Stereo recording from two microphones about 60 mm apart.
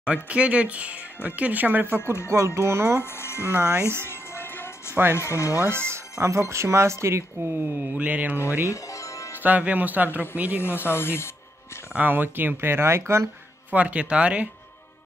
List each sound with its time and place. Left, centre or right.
0.0 s speech: centre
2.2 s speech: right
3.0 s speech: left
3.5 s speech: right
4.1 s music: left
5.1 s speech: left
5.6 s speech: right
7.4 s speech: right
8.6 s music: left
9.4 s speech: right
10.6 s speech: left
11.9 s speech: right
13.7 s speech: right